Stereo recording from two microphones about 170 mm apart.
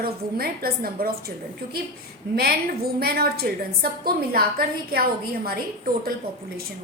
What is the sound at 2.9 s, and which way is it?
A woman's voice, 65° right (ahead or behind).